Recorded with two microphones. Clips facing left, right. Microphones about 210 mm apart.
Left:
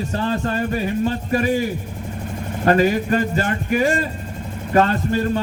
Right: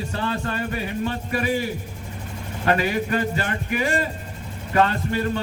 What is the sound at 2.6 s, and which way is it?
Speech, 40° left (ahead or behind).